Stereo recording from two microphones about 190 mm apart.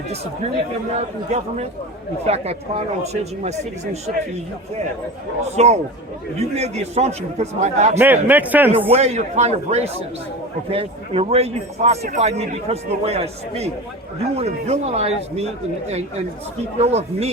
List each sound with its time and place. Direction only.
0.9 s speech: 35° right (ahead or behind)
5.5 s speech: 35° right (ahead or behind)
7.9 s a man's voice: 10° right (ahead or behind)
8.9 s speech: 35° right (ahead or behind)